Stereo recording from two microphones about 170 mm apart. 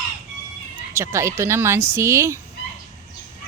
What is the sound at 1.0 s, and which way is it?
Speech, 15° right (ahead or behind).